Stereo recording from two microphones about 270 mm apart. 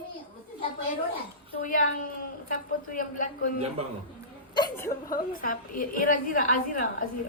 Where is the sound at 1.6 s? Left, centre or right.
Left.